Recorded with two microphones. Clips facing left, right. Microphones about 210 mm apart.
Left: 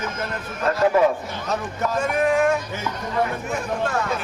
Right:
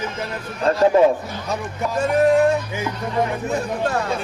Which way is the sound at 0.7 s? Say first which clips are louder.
Right 3 dB; 30° right (ahead or behind).